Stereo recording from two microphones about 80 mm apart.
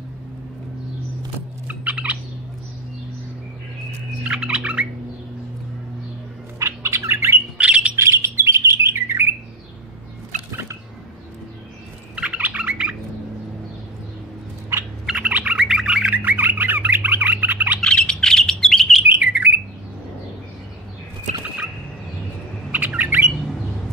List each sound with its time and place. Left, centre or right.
1.7 s fowl: centre
4.2 s bird: centre
6.6 s bird: right
7.5 s squawk: centre
7.9 s bird: right
10.5 s a sound: right
12.2 s bird: centre
15.1 s bird: centre
17.7 s bird: centre
19.2 s bird: centre
22.7 s bird: right